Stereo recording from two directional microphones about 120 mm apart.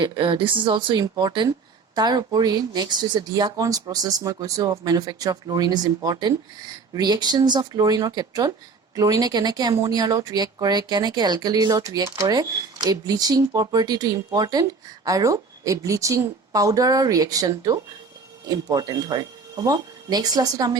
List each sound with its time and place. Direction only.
0.0 s speech: 45° right (ahead or behind)